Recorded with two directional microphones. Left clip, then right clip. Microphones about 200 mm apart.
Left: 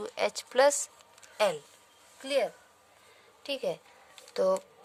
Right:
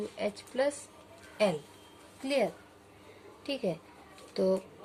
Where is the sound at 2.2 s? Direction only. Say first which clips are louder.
Left 1 dB; 50° left (ahead or behind).